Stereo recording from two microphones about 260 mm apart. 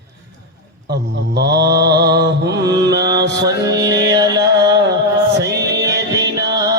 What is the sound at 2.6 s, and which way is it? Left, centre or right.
Speech, centre.